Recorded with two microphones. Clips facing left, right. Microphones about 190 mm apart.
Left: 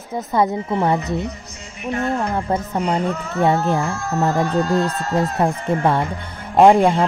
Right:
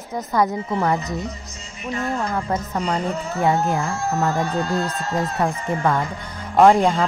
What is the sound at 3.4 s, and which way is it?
Speech, 35° left (ahead or behind).